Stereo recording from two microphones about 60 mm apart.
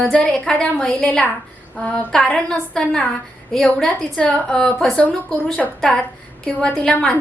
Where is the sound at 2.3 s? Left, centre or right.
Centre.